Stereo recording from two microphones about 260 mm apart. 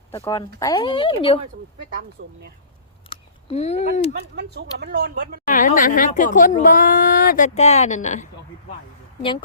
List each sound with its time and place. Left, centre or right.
0.1 s speech: centre
2.2 s speech: right
3.1 s speech: left
4.4 s speech: right
5.5 s speech: left